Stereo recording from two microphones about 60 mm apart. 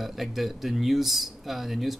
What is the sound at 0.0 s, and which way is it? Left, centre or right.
Speech, centre.